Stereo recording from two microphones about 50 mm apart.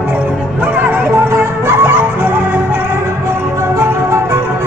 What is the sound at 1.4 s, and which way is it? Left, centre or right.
Music, right.